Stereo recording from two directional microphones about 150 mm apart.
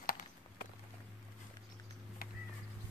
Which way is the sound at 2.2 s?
75° left (ahead or behind).